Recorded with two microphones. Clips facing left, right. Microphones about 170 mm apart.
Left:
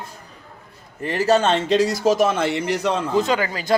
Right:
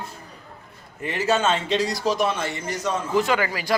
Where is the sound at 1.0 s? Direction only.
40° left (ahead or behind); by 3.1 s 65° left (ahead or behind).